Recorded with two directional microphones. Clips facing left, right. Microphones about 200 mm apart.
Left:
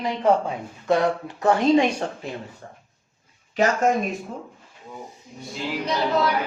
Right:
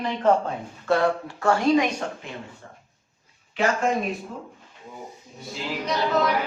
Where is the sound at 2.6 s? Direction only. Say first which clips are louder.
Left 3 dB; 40° left (ahead or behind).